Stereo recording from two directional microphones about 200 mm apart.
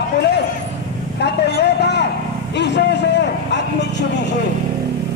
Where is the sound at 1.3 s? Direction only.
55° left (ahead or behind).